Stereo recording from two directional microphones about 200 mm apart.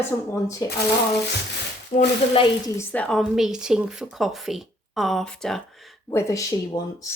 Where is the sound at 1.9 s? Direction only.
40° left (ahead or behind).